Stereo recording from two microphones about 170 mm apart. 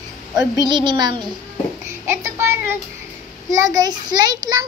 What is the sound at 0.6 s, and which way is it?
A child's voice, 25° right (ahead or behind).